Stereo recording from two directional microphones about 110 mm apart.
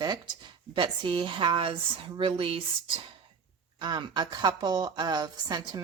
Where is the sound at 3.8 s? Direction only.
45° right (ahead or behind).